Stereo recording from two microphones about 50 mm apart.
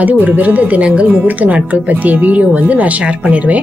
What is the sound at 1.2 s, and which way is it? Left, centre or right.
A woman's voice, right.